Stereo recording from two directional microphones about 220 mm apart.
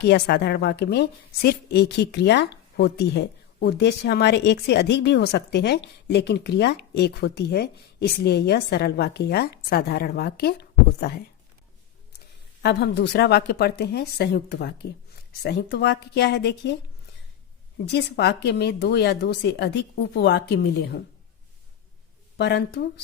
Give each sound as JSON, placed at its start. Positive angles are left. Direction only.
{"t": 0.0, "sound": "a woman's voice", "side_deg": 50}
{"t": 12.6, "sound": "a woman's voice", "side_deg": 50}
{"t": 17.8, "sound": "a woman's voice", "side_deg": 50}
{"t": 22.4, "sound": "a woman's voice", "side_deg": 50}